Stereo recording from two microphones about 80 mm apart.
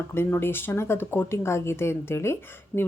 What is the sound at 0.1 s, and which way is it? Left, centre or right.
Speech, left.